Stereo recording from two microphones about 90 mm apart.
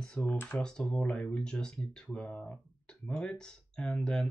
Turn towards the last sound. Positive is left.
turn(degrees=10)  # may be behind; listen again after turning